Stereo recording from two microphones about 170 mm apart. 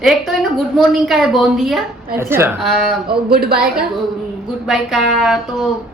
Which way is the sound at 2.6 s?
Centre (ahead or behind).